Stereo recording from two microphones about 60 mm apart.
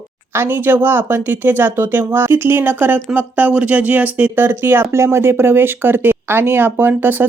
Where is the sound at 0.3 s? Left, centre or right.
Right.